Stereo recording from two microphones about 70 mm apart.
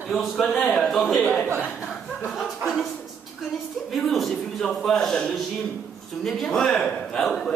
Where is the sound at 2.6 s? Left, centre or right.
Centre.